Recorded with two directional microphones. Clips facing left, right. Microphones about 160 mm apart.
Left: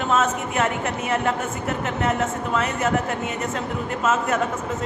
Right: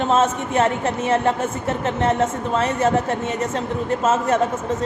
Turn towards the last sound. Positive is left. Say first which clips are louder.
# right 3 dB
turn(degrees=-30)  # may be behind; listen again after turning